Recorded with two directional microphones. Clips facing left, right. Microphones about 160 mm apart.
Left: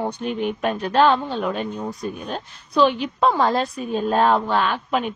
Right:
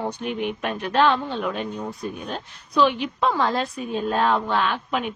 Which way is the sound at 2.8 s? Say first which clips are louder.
Left 2 dB; 35° left (ahead or behind).